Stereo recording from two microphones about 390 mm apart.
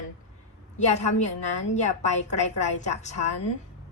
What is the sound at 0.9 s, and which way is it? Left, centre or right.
A woman's voice, centre.